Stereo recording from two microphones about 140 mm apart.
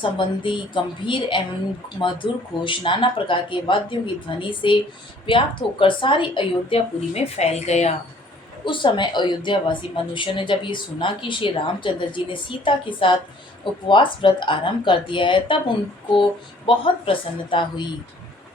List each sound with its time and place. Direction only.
0.0 s a woman's voice: 35° left (ahead or behind); by 7.9 s 50° left (ahead or behind)
8.6 s a woman's voice: 35° left (ahead or behind)